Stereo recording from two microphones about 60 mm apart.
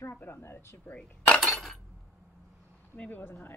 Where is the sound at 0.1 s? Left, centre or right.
Left.